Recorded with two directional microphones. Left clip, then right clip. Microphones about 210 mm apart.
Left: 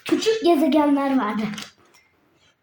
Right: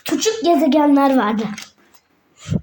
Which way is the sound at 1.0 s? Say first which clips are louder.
Right 7 dB; 45° right (ahead or behind).